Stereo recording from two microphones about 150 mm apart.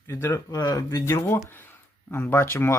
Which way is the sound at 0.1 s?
15° left (ahead or behind).